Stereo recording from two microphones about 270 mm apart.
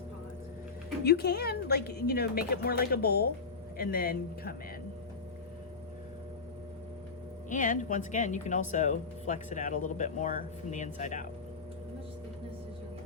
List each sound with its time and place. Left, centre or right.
1.0 s speech: left
7.5 s speech: left